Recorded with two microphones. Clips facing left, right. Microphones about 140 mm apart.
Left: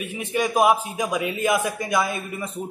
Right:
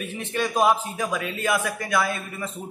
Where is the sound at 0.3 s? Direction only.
10° left (ahead or behind).